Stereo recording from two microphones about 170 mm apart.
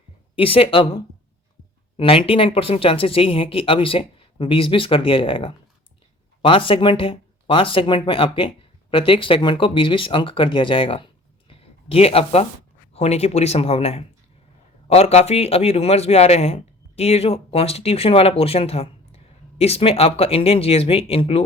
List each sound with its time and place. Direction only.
0.3 s a man's voice: 35° left (ahead or behind)